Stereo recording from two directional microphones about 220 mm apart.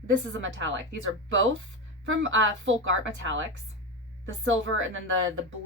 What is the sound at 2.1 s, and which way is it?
A woman's voice, 60° right (ahead or behind).